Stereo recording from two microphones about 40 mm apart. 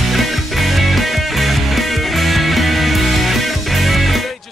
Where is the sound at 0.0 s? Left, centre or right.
Centre.